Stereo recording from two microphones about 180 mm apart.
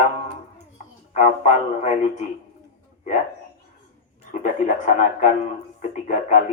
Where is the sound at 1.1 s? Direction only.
45° left (ahead or behind).